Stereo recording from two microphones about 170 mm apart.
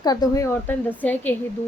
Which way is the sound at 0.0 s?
25° left (ahead or behind).